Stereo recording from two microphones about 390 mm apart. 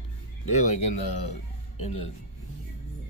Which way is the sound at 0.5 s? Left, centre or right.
Centre.